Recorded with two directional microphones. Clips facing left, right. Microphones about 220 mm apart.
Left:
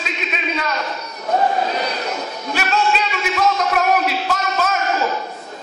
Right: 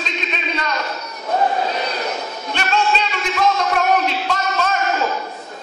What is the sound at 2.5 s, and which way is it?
Music, 5° left (ahead or behind).